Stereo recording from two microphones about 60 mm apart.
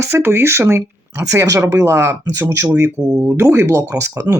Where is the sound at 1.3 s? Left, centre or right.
Right.